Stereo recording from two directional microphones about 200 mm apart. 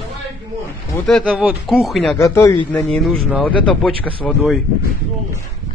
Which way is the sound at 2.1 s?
15° left (ahead or behind).